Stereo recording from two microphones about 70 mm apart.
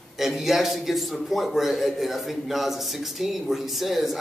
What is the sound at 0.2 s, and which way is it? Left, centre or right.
A man's voice, centre.